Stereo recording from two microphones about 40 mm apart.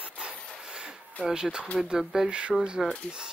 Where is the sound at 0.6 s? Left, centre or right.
Centre.